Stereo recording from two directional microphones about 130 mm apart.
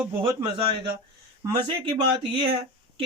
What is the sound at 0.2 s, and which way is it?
Speech, 40° right (ahead or behind).